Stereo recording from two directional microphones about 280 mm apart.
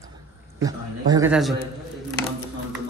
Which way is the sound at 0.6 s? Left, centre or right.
Centre.